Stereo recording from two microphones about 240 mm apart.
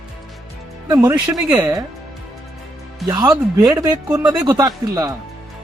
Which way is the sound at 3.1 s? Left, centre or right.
Centre.